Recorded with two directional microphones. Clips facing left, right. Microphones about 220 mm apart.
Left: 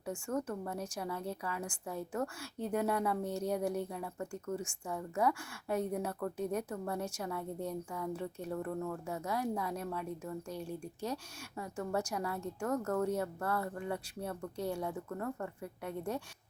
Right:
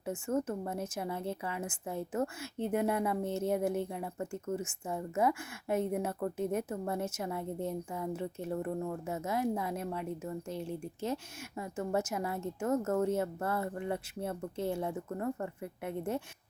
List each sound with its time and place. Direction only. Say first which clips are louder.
0.0 s a woman's voice: right 4 dB; 20° right (ahead or behind)